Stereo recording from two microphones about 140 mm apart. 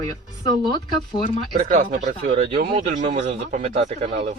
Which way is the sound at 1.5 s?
75° right (ahead or behind).